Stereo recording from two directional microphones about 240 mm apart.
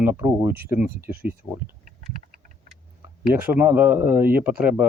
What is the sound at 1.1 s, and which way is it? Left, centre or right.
Speech, right.